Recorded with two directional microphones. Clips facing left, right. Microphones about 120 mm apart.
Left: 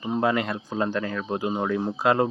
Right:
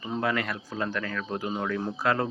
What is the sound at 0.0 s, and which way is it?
Speech, 20° left (ahead or behind).